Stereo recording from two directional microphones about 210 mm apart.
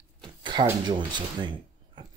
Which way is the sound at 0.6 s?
20° right (ahead or behind).